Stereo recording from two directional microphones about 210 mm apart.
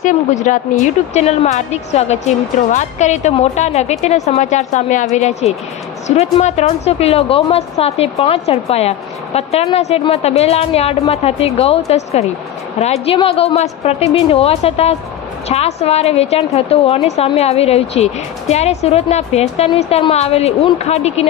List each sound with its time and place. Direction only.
0.0 s a woman's voice: 35° left (ahead or behind)